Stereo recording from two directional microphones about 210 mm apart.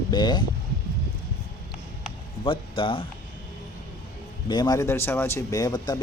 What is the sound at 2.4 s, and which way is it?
Speech, 25° left (ahead or behind).